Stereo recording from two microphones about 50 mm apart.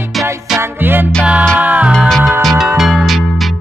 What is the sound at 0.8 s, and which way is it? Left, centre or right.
Music, right.